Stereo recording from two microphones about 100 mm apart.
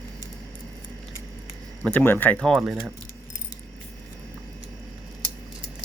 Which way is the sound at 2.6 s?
10° right (ahead or behind).